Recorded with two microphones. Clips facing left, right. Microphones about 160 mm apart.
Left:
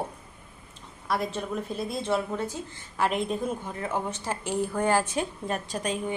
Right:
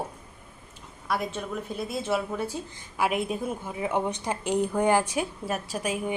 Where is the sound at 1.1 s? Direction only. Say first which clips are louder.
Left 1 dB; centre (ahead or behind).